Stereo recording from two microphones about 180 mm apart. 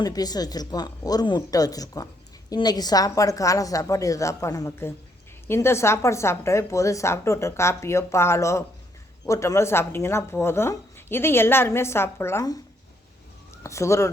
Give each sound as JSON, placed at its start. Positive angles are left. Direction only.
{"t": 0.0, "sound": "a woman's voice", "side_deg": 20}
{"t": 13.6, "sound": "speech", "side_deg": 15}